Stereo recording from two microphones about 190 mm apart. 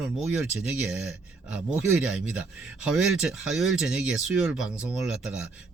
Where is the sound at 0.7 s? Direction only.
5° right (ahead or behind).